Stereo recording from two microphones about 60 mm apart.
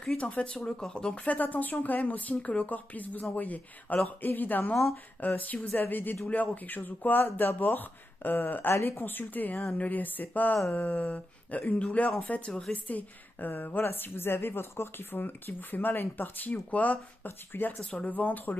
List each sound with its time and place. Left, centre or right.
0.2 s a woman's voice: centre
17.5 s a woman's voice: left